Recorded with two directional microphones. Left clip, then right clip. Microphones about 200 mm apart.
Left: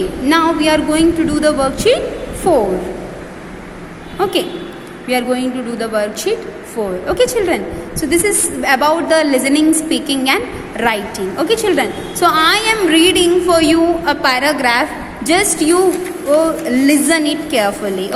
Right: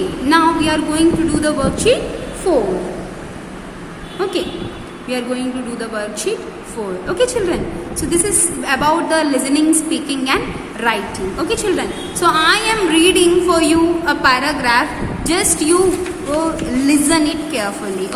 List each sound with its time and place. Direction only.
0.3 s a woman's voice: 20° left (ahead or behind)
4.2 s a woman's voice: 25° left (ahead or behind)